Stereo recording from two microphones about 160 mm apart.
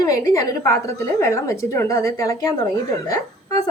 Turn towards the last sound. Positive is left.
turn(degrees=20)  # may be behind; listen again after turning